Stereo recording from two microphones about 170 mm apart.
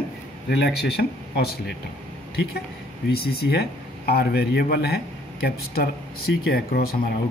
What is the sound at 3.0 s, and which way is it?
Speech, 65° left (ahead or behind).